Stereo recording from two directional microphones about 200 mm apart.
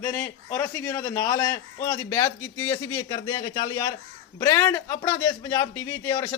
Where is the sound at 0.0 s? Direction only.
15° left (ahead or behind).